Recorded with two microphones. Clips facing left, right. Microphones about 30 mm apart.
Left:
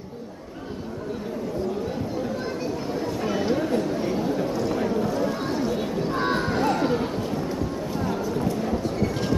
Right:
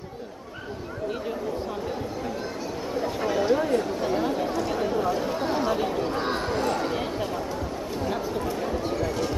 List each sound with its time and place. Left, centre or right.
3.3 s a sound: centre
5.5 s chatter: right
6.1 s crowd: centre